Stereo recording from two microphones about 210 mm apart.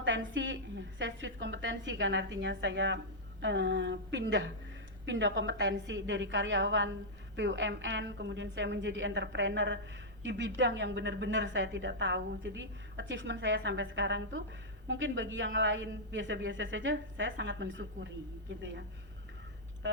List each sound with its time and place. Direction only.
0.0 s a woman's voice: 60° right (ahead or behind)